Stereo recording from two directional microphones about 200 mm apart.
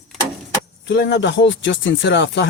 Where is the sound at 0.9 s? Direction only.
65° left (ahead or behind).